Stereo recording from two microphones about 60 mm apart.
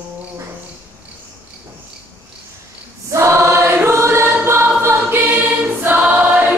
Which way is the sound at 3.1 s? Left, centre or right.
Right.